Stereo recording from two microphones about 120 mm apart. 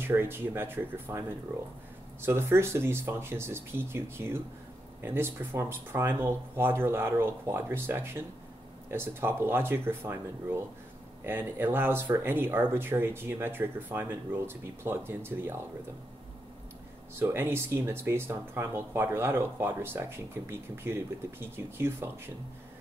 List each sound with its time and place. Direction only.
0.0 s speech: 20° right (ahead or behind)
2.2 s speech: 20° right (ahead or behind)
17.1 s speech: 20° right (ahead or behind)